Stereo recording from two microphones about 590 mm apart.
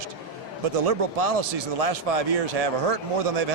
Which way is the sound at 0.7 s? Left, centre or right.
Right.